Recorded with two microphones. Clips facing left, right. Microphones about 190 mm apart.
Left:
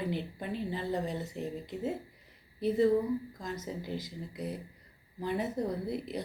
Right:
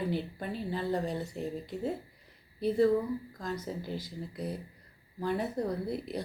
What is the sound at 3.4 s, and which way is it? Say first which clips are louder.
Speech: right 2 dB; 20° left (ahead or behind).